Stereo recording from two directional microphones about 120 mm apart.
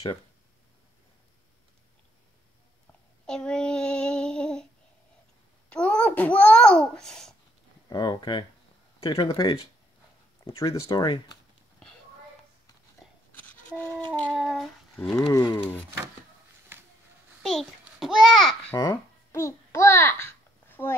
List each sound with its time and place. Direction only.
3.3 s child singing: 5° left (ahead or behind)
5.7 s a child's voice: 10° left (ahead or behind)
7.9 s speech: 35° left (ahead or behind)
10.5 s speech: 50° left (ahead or behind)
10.9 s speech: 35° left (ahead or behind)
13.3 s a sound: 15° left (ahead or behind)
14.1 s a child's voice: 10° left (ahead or behind)
14.4 s speech: centre (ahead or behind)
15.3 s speech: 30° left (ahead or behind)
16.7 s a sound: 20° right (ahead or behind)
17.4 s a child's voice: centre (ahead or behind)
18.8 s babbling: 25° left (ahead or behind)